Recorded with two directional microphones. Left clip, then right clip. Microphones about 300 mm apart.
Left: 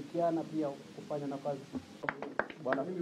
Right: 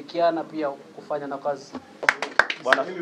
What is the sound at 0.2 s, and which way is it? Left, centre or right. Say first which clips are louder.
Speech: right 10 dB; centre.